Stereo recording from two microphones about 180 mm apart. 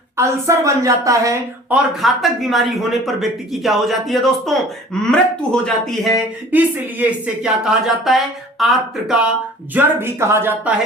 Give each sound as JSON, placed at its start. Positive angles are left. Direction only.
{"t": 0.2, "sound": "speech", "side_deg": -15}
{"t": 2.0, "sound": "speech", "side_deg": 0}
{"t": 6.5, "sound": "speech", "side_deg": -10}